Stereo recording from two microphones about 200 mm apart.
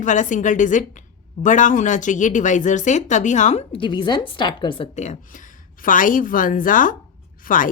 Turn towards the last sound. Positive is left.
turn(degrees=40)  # may be behind; listen again after turning